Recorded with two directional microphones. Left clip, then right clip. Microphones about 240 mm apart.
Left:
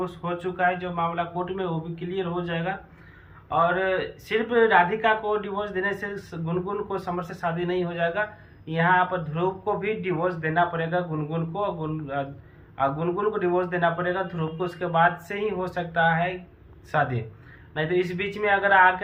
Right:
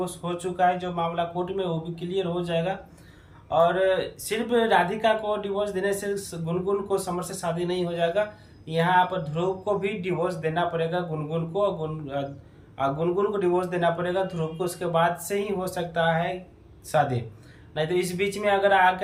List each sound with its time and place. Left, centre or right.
0.0 s speech: centre